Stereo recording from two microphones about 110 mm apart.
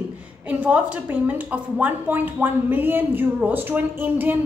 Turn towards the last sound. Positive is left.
turn(degrees=-15)  # may be behind; listen again after turning